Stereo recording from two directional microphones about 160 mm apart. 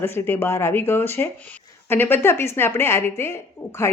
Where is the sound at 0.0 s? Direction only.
15° left (ahead or behind).